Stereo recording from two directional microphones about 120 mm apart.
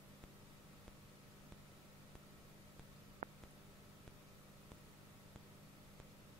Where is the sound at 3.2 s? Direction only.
65° right (ahead or behind).